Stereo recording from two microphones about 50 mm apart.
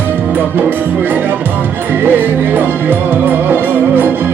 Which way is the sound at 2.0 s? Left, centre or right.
Right.